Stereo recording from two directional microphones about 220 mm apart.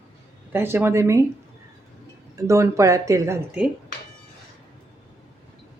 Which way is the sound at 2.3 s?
15° right (ahead or behind).